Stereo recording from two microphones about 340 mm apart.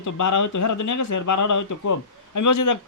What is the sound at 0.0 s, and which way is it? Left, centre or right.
Speech, left.